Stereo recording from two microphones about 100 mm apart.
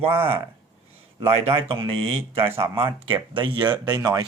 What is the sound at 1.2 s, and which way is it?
A man's voice, 65° right (ahead or behind).